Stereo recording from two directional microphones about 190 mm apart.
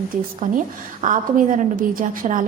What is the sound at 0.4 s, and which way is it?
A woman's voice, 45° right (ahead or behind).